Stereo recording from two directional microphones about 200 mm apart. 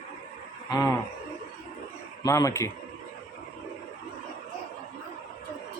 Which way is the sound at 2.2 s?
15° left (ahead or behind).